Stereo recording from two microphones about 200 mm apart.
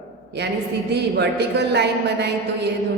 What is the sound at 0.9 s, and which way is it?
A woman's voice, 55° right (ahead or behind).